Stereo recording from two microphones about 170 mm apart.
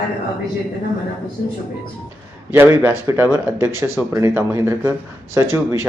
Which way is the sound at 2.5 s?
15° right (ahead or behind).